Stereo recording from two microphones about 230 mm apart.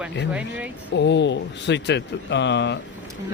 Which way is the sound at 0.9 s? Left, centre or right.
Left.